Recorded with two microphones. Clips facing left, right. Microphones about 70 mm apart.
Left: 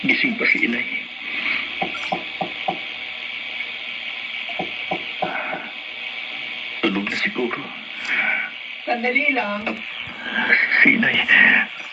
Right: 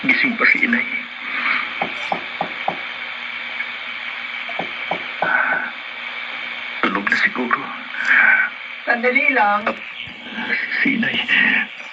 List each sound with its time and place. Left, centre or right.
0.0 s speech: right
1.3 s wood: right
4.5 s a sound: right
6.8 s radio: right
8.9 s speech: right
10.3 s a sound: left
11.3 s speech: centre